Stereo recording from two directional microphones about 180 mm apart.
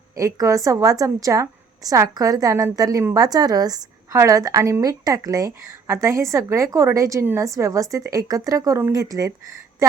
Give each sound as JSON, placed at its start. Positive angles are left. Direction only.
{"t": 0.2, "sound": "a woman's voice", "side_deg": -15}